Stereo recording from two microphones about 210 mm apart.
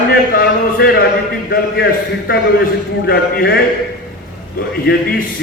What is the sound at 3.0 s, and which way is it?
Speech, 45° left (ahead or behind).